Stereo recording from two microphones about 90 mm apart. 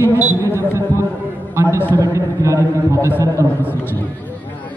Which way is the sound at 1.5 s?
30° right (ahead or behind).